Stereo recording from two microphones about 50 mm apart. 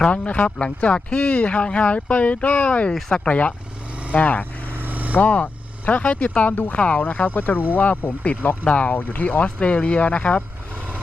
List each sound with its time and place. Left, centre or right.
0.0 s speech: left
4.7 s vehicle: right
5.1 s speech: left